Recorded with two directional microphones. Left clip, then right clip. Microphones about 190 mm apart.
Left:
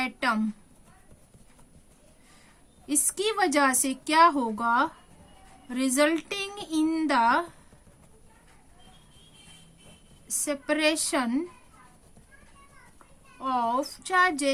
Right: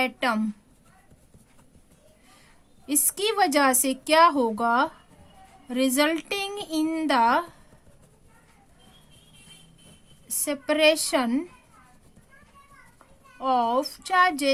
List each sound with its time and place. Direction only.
0.0 s a woman's voice: 25° right (ahead or behind)
2.8 s a woman's voice: 25° right (ahead or behind)
10.2 s a woman's voice: 25° right (ahead or behind)
13.4 s a woman's voice: 25° right (ahead or behind)